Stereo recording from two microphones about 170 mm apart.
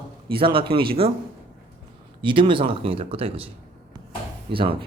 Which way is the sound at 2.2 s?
30° right (ahead or behind).